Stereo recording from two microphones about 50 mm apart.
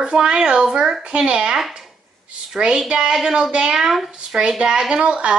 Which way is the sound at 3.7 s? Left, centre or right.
Centre.